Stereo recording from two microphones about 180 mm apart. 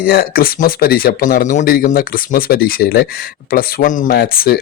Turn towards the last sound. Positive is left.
turn(degrees=60)  # may be behind; listen again after turning